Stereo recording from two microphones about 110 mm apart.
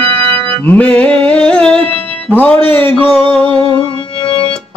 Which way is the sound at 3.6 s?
55° left (ahead or behind).